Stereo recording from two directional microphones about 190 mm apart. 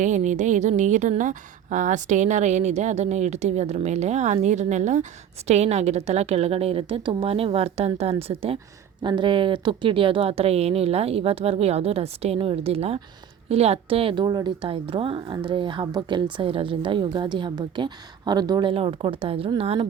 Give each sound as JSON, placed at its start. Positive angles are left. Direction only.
{"t": 0.0, "sound": "a woman's voice", "side_deg": -40}